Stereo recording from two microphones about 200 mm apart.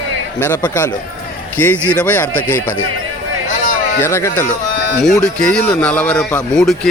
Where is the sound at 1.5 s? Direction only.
10° left (ahead or behind).